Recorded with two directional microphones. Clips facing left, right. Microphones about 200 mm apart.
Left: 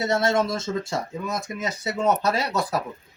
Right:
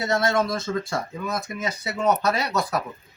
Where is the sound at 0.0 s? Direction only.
25° left (ahead or behind).